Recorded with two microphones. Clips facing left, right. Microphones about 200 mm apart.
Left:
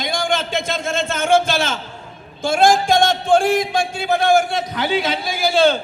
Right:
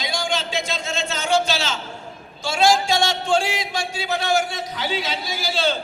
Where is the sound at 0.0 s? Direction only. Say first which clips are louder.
Left 4 dB; 55° left (ahead or behind).